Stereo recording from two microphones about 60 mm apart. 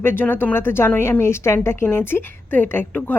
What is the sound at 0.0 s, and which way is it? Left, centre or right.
A woman's voice, left.